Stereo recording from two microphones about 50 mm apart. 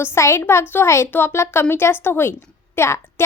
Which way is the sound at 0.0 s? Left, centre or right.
Left.